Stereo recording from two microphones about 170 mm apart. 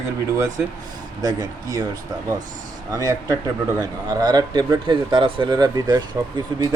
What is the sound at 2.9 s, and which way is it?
Speech, 20° right (ahead or behind).